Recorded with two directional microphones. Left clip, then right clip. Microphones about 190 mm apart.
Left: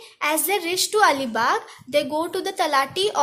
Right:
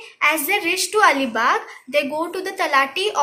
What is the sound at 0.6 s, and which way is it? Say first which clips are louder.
A woman's voice: right 2 dB; 40° left (ahead or behind).